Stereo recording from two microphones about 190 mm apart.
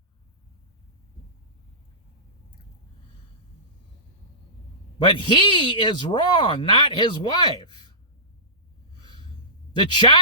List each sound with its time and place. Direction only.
4.9 s speech: 25° left (ahead or behind)
9.7 s speech: 25° left (ahead or behind)